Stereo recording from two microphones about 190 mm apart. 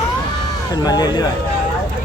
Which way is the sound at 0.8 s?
20° left (ahead or behind).